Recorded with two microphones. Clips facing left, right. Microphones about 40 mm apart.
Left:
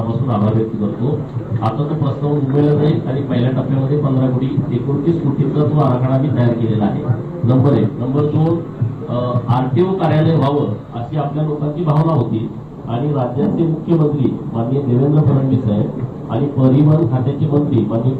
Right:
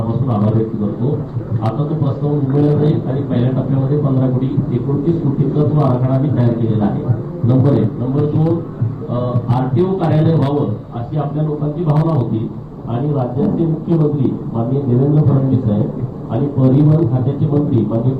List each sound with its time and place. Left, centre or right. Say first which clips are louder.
0.0 s a man's voice: even; left